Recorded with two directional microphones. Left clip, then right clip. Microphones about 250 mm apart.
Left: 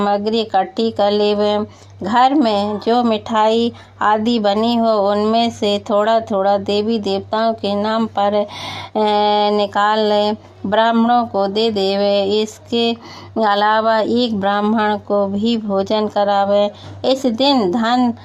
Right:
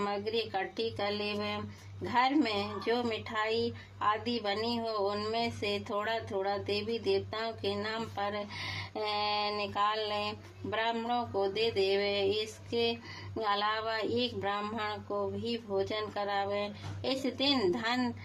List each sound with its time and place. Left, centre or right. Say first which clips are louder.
0.0 s speech: left 16 dB; left